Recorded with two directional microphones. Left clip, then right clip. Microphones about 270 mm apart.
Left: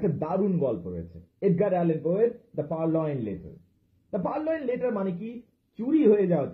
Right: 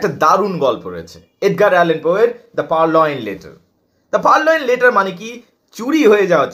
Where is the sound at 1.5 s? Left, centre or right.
Right.